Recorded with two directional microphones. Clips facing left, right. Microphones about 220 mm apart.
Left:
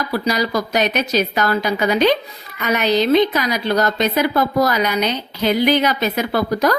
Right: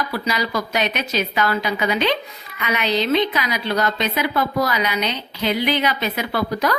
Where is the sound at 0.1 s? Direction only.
40° left (ahead or behind).